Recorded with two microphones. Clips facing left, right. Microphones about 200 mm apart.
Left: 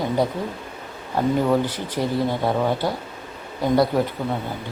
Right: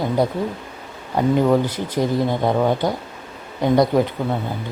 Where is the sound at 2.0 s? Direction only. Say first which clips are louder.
Right 3 dB; 15° right (ahead or behind).